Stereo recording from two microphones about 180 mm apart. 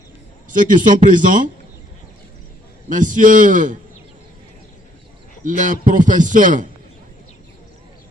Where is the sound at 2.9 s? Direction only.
45° right (ahead or behind).